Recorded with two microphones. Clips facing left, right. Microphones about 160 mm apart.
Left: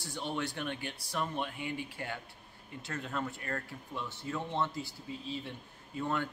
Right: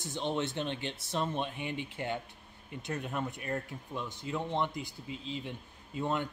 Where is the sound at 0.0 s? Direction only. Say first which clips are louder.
Right 3 dB; 20° right (ahead or behind).